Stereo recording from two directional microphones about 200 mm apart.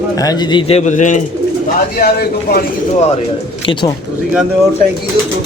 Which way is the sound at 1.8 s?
50° left (ahead or behind).